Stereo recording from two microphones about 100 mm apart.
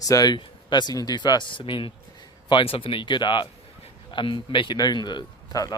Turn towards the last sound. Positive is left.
turn(degrees=40)  # may be behind; listen again after turning